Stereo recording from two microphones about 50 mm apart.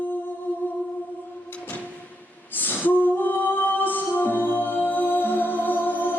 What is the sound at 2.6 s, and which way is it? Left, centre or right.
Music, left.